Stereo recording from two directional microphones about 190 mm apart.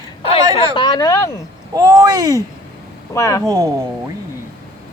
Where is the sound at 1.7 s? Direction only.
20° right (ahead or behind).